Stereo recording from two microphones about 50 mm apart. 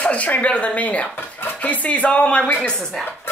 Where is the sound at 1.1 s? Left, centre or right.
Left.